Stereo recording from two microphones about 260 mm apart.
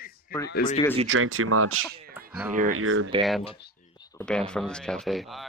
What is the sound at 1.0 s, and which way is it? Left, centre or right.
Speech, right.